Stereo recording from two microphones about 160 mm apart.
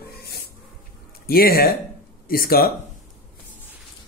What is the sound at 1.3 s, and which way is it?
Music, 70° left (ahead or behind).